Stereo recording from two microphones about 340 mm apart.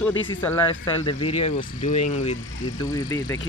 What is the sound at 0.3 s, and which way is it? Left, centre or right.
Speech, centre.